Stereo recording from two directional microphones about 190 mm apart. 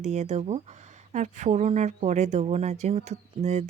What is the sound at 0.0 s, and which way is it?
A woman's voice, 35° right (ahead or behind).